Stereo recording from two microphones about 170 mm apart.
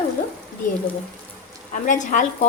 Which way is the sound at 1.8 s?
50° left (ahead or behind).